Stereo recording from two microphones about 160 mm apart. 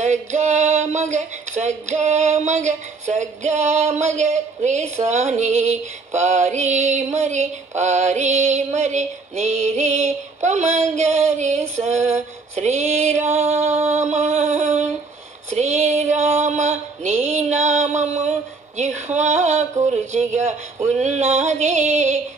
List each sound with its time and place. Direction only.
0.0 s female singing: 50° right (ahead or behind)